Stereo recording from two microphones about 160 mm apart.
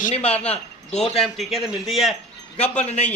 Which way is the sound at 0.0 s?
40° left (ahead or behind).